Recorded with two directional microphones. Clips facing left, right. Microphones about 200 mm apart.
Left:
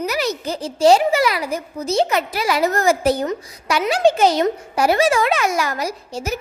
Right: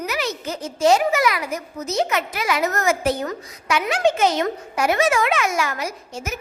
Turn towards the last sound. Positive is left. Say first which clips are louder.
# left 5 dB
turn(degrees=35)  # may be behind; listen again after turning